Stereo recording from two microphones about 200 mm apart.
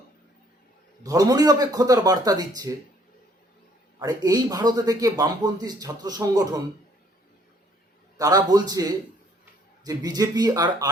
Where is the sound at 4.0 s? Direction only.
15° right (ahead or behind).